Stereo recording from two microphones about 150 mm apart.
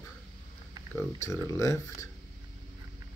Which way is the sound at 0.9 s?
20° left (ahead or behind).